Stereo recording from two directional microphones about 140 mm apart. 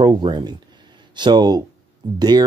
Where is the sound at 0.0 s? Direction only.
30° right (ahead or behind).